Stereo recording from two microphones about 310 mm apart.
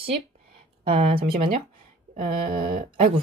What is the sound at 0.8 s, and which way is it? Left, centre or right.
Speech, centre.